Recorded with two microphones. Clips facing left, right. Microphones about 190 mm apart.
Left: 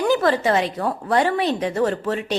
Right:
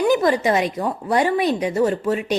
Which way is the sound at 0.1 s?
15° right (ahead or behind).